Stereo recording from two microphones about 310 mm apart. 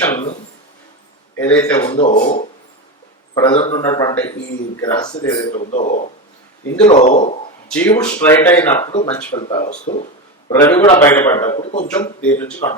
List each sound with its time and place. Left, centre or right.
1.4 s a man's voice: centre
2.0 s a man's voice: left; by 5.5 s centre
5.5 s speech: left
7.7 s a man's voice: centre
8.9 s speech: centre
10.5 s a man's voice: centre